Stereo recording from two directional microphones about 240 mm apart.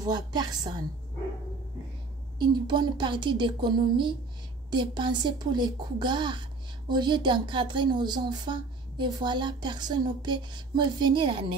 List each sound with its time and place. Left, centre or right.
0.0 s a woman's voice: centre
2.3 s speech: centre